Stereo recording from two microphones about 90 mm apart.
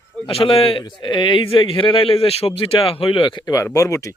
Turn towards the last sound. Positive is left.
turn(degrees=35)  # may be behind; listen again after turning